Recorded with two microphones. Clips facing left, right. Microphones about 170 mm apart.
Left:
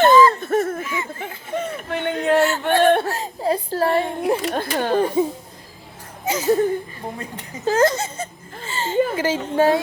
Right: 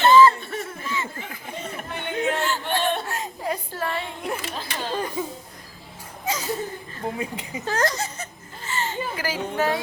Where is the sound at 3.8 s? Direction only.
45° left (ahead or behind).